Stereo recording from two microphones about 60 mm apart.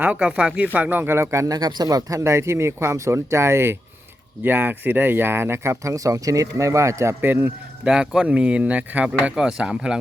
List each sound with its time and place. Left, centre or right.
0.0 s speech: right
1.5 s speech: right
4.4 s speech: right
5.8 s speech: right
7.2 s speech: right
7.9 s speech: centre
9.3 s speech: centre